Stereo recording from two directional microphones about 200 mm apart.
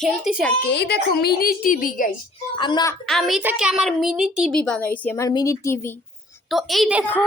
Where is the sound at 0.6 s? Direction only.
55° left (ahead or behind).